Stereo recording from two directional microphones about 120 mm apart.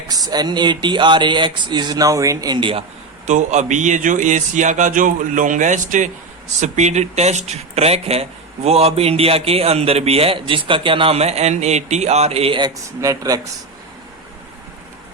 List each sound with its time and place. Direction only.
0.1 s speech: 35° right (ahead or behind)
3.2 s speech: 80° right
6.6 s speech: 70° right (ahead or behind); by 12.5 s 55° right (ahead or behind)
12.5 s speech: 30° right (ahead or behind)